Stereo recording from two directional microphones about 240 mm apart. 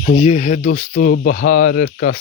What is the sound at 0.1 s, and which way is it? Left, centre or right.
Speech, left.